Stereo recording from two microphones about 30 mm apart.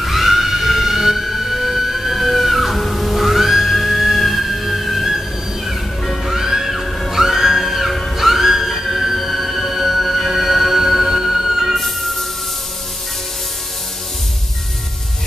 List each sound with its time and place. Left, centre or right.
0.0 s emergency vehicle: centre
6.3 s music: centre